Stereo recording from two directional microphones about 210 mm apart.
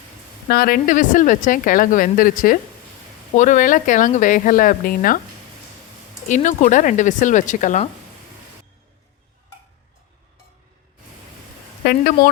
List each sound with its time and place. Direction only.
0.4 s a woman's voice: 45° left (ahead or behind)
6.2 s a woman's voice: 35° left (ahead or behind)
11.9 s speech: 45° left (ahead or behind)